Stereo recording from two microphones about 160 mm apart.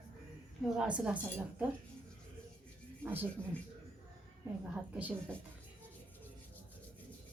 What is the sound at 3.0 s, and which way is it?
Speech, 10° right (ahead or behind).